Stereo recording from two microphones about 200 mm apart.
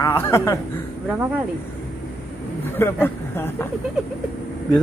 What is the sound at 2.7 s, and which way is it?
Speech, 10° left (ahead or behind).